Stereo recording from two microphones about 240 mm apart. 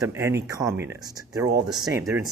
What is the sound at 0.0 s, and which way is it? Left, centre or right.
Speech, centre.